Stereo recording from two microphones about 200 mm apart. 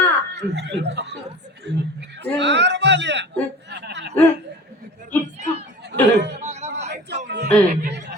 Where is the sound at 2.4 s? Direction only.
60° right (ahead or behind).